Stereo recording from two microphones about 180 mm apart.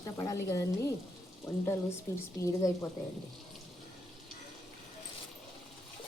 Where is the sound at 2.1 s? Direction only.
15° left (ahead or behind).